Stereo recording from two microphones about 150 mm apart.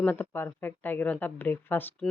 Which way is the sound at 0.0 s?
15° left (ahead or behind).